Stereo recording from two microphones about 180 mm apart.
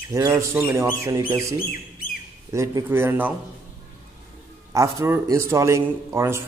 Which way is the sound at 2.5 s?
15° right (ahead or behind).